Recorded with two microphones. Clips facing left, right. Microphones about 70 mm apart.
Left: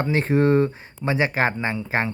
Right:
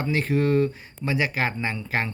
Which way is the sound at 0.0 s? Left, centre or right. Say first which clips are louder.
Left 4 dB; left.